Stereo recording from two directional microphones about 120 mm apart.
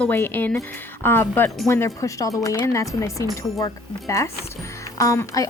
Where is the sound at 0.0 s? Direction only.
15° left (ahead or behind).